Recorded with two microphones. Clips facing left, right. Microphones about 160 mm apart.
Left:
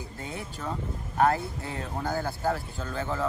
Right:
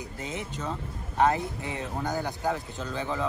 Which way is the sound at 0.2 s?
20° right (ahead or behind).